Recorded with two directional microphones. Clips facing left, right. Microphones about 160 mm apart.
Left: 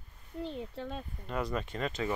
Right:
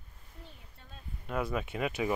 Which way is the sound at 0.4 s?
85° left.